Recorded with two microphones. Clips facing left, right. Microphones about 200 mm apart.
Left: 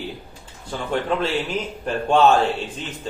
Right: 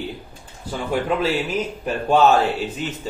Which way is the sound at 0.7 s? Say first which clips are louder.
Right 1 dB; 5° right (ahead or behind).